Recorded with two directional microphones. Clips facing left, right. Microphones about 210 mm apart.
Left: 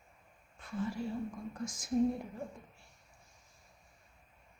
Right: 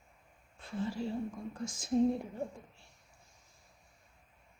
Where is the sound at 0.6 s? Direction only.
30° right (ahead or behind).